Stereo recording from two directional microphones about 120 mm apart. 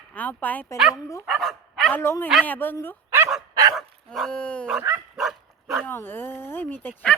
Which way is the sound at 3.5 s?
30° right (ahead or behind).